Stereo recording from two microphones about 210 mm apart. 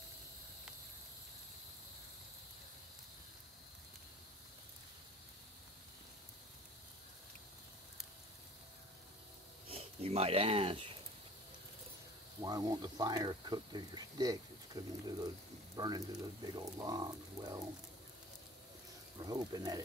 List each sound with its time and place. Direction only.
9.7 s speech: 30° right (ahead or behind)
12.4 s speech: 15° right (ahead or behind)
19.1 s speech: 20° right (ahead or behind)